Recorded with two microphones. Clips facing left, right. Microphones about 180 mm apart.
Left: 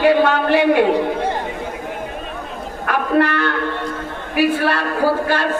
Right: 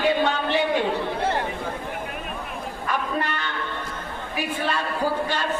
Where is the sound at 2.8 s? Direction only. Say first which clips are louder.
Left 10 dB; 65° left (ahead or behind).